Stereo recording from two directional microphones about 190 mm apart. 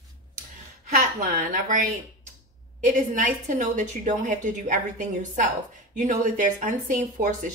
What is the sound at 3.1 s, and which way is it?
A woman's voice, 40° right (ahead or behind).